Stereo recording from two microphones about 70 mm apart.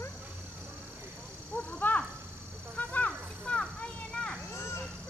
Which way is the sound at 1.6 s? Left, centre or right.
Centre.